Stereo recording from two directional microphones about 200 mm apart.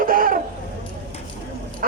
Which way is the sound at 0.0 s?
45° right (ahead or behind).